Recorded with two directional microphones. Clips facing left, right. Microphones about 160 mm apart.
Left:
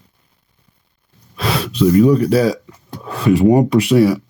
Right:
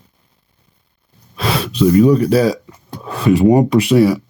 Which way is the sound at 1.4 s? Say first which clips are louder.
Right 1 dB; 25° right (ahead or behind).